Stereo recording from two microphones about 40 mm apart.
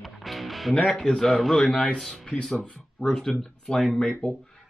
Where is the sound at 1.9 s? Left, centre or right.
Left.